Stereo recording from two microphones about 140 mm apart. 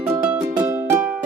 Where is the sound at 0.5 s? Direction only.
15° right (ahead or behind).